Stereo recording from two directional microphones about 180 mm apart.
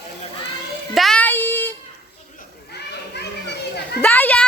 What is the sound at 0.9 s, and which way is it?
Speech, 5° left (ahead or behind).